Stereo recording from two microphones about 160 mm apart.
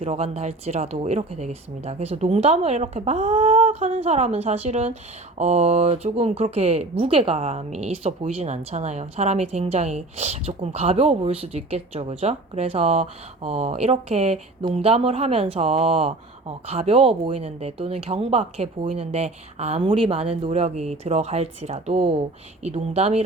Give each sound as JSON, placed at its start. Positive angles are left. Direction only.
{"t": 0.0, "sound": "speech", "side_deg": -40}